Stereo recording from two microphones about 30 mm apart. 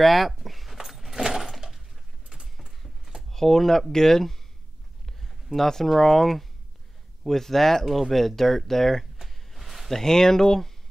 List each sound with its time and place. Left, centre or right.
0.0 s keys jangling: centre
3.3 s speech: centre
5.0 s a sound: centre
5.9 s speech: centre
7.8 s speech: centre
9.5 s a sound: centre
9.9 s speech: centre